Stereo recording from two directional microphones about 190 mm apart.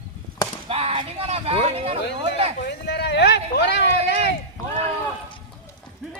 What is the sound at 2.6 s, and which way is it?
Speech, 60° left (ahead or behind).